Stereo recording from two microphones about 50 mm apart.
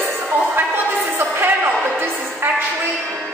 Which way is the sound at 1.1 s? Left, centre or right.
Right.